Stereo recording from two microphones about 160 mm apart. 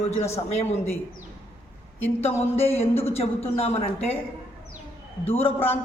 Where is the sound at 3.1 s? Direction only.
40° left (ahead or behind).